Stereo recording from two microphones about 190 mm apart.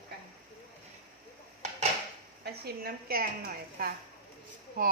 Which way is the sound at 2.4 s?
55° right (ahead or behind).